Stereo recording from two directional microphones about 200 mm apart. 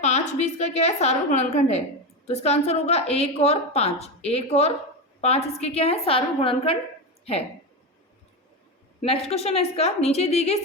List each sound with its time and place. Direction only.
0.0 s a woman's voice: 35° left (ahead or behind)
9.0 s a woman's voice: 30° left (ahead or behind)